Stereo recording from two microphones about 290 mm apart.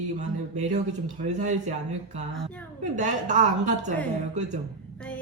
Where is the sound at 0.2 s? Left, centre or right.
Right.